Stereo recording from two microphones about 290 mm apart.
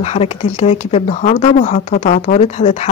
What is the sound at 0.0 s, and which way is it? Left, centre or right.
A woman's voice, left.